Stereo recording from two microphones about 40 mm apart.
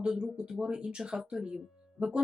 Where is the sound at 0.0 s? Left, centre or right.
Right.